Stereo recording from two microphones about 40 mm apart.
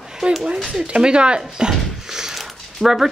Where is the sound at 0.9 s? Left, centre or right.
Right.